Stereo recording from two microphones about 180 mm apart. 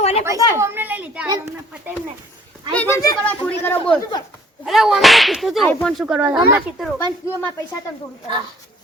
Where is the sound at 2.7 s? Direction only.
15° left (ahead or behind).